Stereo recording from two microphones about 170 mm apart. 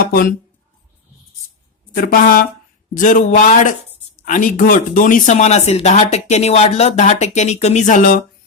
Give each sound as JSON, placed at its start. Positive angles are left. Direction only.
{"t": 0.0, "sound": "speech", "side_deg": 55}
{"t": 2.0, "sound": "a woman's voice", "side_deg": 55}